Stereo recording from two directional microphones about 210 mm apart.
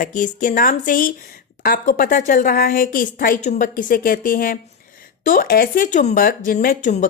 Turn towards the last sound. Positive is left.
turn(degrees=35)  # may be behind; listen again after turning